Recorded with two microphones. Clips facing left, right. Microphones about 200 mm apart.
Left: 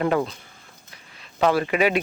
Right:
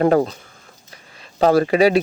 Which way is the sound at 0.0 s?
40° right (ahead or behind).